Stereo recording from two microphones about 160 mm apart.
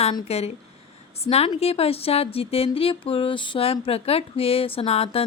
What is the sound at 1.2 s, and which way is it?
A woman's voice, 40° left (ahead or behind).